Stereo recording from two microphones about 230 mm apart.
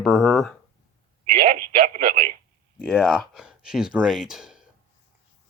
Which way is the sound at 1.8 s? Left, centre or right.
Right.